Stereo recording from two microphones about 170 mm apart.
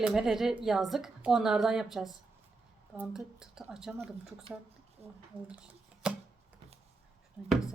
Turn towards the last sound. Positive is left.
turn(degrees=-5)  # may be behind; listen again after turning